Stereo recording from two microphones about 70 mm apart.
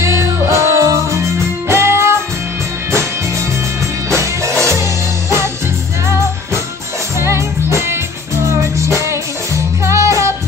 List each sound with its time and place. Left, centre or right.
0.0 s music: right
7.2 s music: right